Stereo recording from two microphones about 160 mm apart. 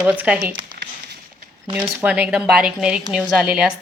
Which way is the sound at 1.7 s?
10° right (ahead or behind).